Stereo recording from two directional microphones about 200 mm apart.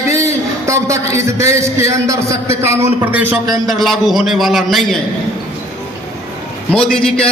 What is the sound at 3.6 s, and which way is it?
A man's voice, centre (ahead or behind).